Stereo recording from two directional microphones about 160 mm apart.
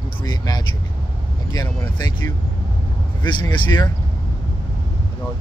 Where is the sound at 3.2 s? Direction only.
25° left (ahead or behind).